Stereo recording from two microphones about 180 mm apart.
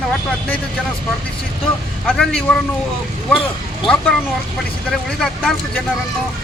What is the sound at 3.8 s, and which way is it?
Speech, 5° left (ahead or behind).